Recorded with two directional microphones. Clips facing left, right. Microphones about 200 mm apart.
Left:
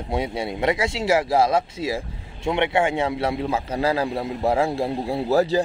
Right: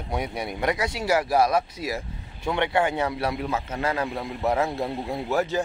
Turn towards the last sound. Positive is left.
turn(degrees=35)  # may be behind; listen again after turning